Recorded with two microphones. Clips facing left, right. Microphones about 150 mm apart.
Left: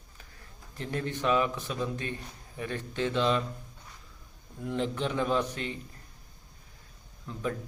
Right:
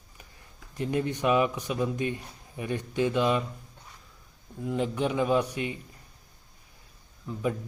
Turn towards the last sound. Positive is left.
turn(degrees=-10)  # may be behind; listen again after turning